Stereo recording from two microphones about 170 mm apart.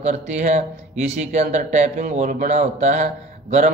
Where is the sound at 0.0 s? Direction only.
45° right (ahead or behind).